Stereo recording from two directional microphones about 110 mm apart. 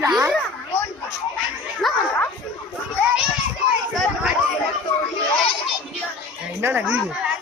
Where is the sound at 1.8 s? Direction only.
Centre (ahead or behind).